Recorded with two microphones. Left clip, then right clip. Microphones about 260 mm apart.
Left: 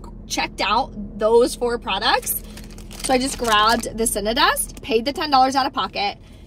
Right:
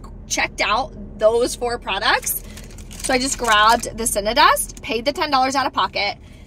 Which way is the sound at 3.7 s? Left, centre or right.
Centre.